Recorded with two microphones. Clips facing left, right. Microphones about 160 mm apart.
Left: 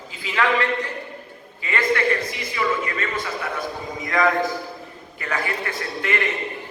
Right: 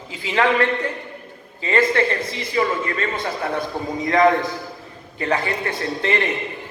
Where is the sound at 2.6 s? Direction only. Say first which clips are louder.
Right 3 dB; 35° right (ahead or behind).